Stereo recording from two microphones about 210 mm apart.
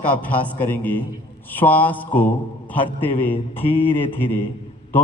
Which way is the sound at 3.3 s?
25° left (ahead or behind).